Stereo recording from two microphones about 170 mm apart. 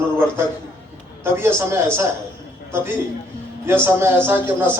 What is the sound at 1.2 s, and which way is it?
A man's voice, 15° right (ahead or behind).